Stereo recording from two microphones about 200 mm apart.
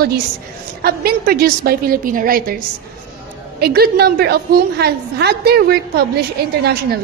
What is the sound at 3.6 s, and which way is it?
A woman's voice, 50° right (ahead or behind).